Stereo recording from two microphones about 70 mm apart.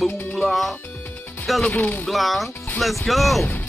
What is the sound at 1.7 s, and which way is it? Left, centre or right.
Speech, left.